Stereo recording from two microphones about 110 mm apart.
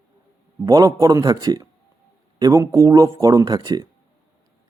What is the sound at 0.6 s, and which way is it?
Speech, 35° right (ahead or behind).